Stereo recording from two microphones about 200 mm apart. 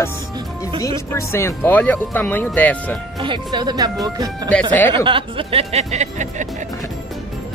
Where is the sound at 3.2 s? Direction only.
25° right (ahead or behind).